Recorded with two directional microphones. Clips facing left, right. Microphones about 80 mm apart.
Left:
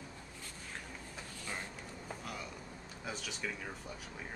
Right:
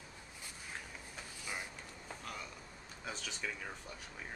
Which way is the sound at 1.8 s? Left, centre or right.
Centre.